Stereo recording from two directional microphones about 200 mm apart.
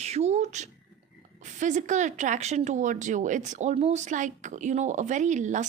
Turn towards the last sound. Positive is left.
turn(degrees=-35)  # may be behind; listen again after turning